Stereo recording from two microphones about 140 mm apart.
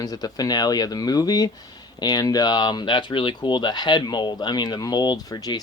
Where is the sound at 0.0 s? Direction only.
25° left (ahead or behind).